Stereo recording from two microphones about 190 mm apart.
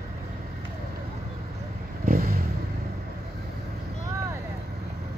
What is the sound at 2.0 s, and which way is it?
Vehicle, 50° right (ahead or behind).